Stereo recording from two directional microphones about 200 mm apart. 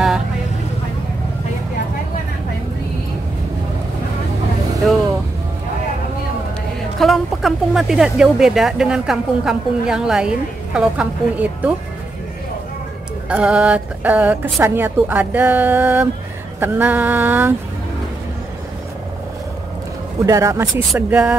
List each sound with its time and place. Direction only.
7.0 s speech: centre (ahead or behind)
13.3 s a woman's voice: 5° right (ahead or behind)
20.2 s a woman's voice: 15° right (ahead or behind)